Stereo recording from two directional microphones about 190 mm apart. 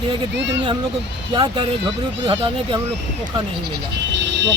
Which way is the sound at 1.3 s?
25° right (ahead or behind).